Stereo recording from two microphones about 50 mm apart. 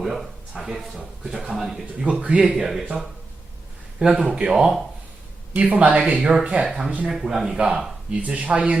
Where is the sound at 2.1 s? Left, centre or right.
Right.